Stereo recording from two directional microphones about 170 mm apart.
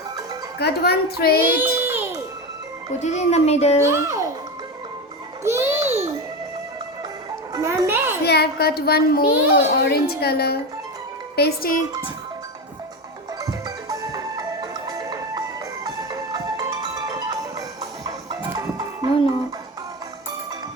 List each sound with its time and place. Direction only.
0.6 s a child's voice: 70° left (ahead or behind)
1.5 s baby cry: 10° right (ahead or behind)
3.0 s speech: 40° left (ahead or behind)
3.8 s a child's voice: 15° right (ahead or behind)
5.4 s music: 15° right (ahead or behind)
5.8 s babbling: 40° right (ahead or behind)
7.5 s music: 20° right (ahead or behind)
8.2 s a child's voice: 70° left (ahead or behind)
13.4 s music: 20° right (ahead or behind)